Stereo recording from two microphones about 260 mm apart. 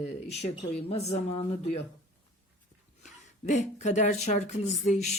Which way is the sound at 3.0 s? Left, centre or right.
Left.